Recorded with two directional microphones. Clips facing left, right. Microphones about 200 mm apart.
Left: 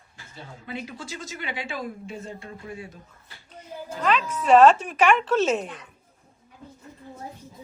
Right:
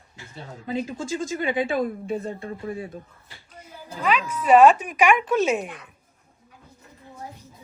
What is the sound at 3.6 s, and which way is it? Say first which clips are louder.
A woman's voice: left 2 dB; 10° right (ahead or behind).